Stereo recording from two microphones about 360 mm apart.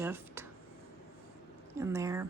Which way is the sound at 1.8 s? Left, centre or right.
Centre.